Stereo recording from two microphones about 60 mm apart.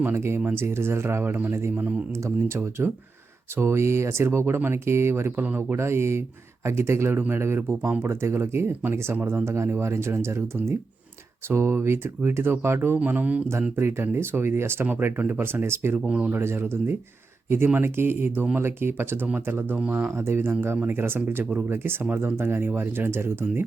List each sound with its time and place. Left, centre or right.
0.0 s speech: right
16.0 s speech: centre
16.3 s speech: right